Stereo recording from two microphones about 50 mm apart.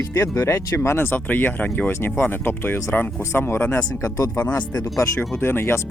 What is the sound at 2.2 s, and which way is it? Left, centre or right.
Speech, left.